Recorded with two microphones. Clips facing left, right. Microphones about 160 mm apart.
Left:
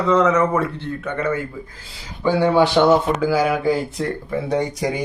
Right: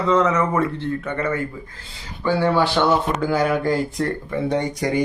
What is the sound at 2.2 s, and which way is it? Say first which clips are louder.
Speech: left 3 dB; 15° left (ahead or behind).